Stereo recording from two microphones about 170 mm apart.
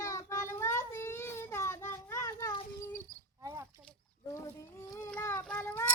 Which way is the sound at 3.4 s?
15° right (ahead or behind).